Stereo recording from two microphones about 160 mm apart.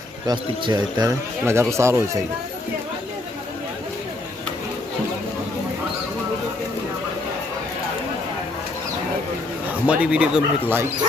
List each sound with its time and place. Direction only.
0.3 s speech: 25° right (ahead or behind)
1.5 s speech: 15° right (ahead or behind)
9.8 s speech: 5° right (ahead or behind)